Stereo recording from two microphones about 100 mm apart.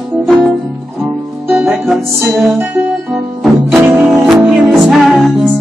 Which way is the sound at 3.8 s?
15° right (ahead or behind).